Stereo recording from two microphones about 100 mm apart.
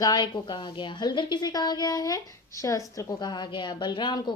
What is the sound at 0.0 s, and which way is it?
A woman's voice, 45° left (ahead or behind).